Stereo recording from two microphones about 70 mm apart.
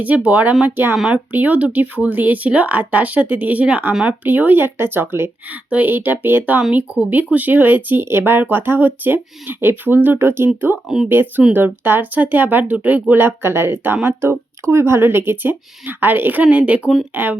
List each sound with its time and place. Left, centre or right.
0.3 s speech: centre
6.6 s speech: centre; by 10.8 s right
10.8 s speech: centre
11.1 s speech: right